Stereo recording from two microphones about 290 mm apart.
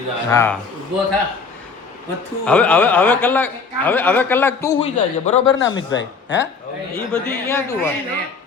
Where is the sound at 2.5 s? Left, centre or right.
Centre.